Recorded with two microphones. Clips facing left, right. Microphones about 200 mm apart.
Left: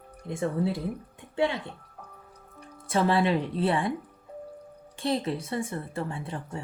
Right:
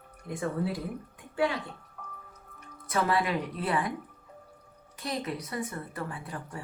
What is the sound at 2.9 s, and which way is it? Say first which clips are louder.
Speech: left 4 dB; 30° left (ahead or behind).